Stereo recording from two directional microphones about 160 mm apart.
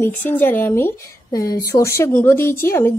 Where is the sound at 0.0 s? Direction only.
10° left (ahead or behind).